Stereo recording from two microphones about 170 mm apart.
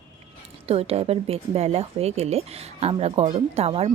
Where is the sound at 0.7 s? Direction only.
35° right (ahead or behind).